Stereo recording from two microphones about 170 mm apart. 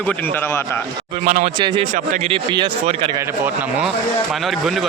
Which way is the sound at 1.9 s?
50° right (ahead or behind).